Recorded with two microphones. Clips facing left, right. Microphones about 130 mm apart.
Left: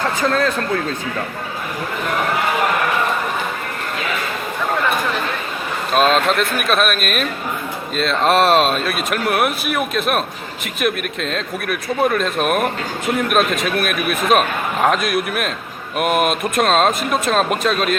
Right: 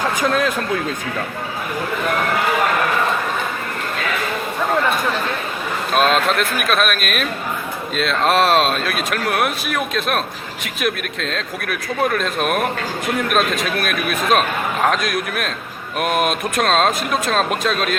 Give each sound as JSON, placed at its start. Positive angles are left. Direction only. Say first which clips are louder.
{"t": 0.0, "sound": "speech", "louder": "even", "side_deg": -15}
{"t": 5.9, "sound": "a man's voice", "louder": "left 1 dB", "side_deg": 0}